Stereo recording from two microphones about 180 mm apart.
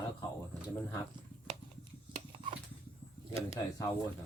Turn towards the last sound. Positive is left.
turn(degrees=20)  # may be behind; listen again after turning